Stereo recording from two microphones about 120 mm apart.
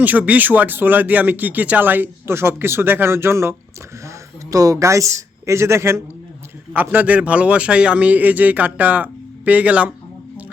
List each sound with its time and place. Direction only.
0.0 s speech: 15° right (ahead or behind)
4.5 s speech: 30° right (ahead or behind); by 9.9 s 10° right (ahead or behind)